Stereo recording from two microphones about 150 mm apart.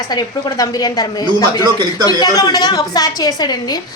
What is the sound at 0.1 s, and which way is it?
A woman's voice, 25° left (ahead or behind).